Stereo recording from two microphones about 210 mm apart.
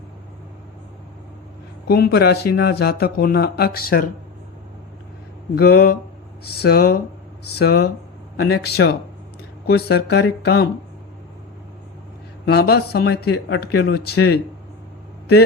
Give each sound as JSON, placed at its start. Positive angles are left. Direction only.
{"t": 1.9, "sound": "speech", "side_deg": 50}
{"t": 5.5, "sound": "speech", "side_deg": 45}
{"t": 12.5, "sound": "speech", "side_deg": 50}